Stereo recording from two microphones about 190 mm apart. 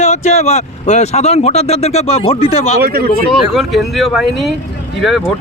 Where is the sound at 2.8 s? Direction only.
55° right (ahead or behind).